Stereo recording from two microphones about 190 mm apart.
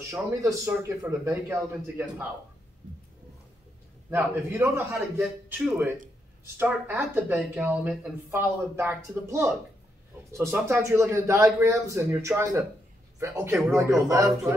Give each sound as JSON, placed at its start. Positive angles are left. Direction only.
{"t": 0.1, "sound": "a woman's voice", "side_deg": -15}
{"t": 4.1, "sound": "a woman's voice", "side_deg": -10}